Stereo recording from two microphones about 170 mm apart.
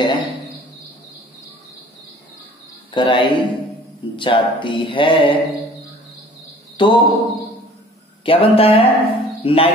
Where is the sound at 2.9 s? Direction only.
30° left (ahead or behind).